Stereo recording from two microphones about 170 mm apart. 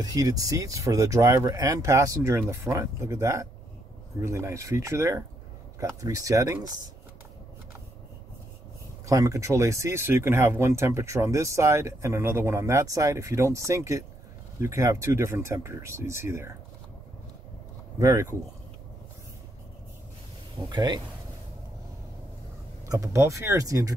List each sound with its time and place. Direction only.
0.0 s speech: 20° right (ahead or behind)
9.0 s speech: 20° right (ahead or behind)
17.9 s speech: 20° right (ahead or behind)
20.5 s speech: 25° right (ahead or behind)
22.8 s speech: 20° right (ahead or behind)